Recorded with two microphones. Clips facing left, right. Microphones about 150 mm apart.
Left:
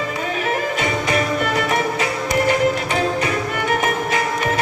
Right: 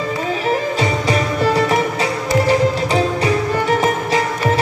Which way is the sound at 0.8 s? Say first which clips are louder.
Right 2 dB; 35° right (ahead or behind).